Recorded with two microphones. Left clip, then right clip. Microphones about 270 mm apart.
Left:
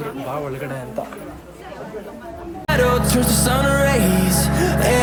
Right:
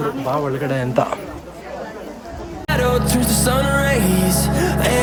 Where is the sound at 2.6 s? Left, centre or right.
Centre.